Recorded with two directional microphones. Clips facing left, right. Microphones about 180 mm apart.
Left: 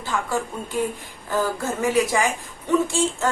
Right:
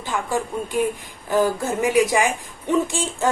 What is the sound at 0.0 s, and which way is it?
A woman's voice, 15° right (ahead or behind).